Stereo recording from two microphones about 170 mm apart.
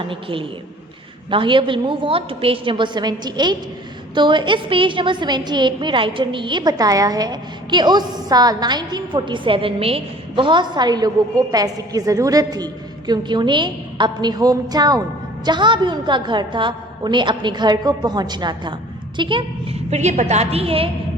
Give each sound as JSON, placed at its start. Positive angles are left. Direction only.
{"t": 0.0, "sound": "a woman's voice", "side_deg": -30}